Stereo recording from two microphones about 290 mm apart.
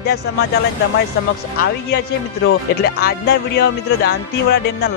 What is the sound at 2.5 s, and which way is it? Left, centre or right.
Speech, left.